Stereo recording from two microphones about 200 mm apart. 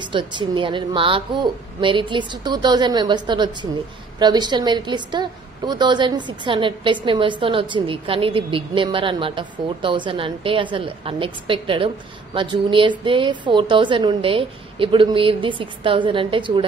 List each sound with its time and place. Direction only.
0.0 s a woman's voice: 25° right (ahead or behind)